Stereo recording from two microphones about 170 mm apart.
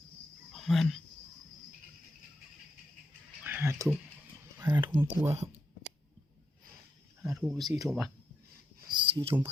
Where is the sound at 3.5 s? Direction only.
15° right (ahead or behind).